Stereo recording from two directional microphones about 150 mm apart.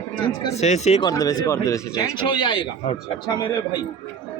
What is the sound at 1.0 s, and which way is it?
Speech, 25° left (ahead or behind).